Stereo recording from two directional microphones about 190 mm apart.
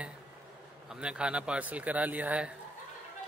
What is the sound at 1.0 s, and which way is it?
A man's voice, 5° right (ahead or behind).